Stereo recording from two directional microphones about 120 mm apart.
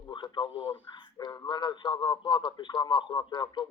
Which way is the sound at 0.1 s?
40° left (ahead or behind).